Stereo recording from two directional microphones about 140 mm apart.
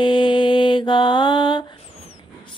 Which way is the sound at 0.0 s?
35° left (ahead or behind).